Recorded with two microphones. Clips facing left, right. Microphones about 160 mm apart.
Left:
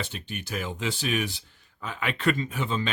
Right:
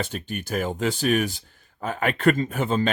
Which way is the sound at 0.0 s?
45° right (ahead or behind).